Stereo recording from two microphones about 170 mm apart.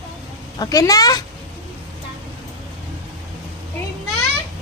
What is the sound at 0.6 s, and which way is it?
Speech, 20° left (ahead or behind).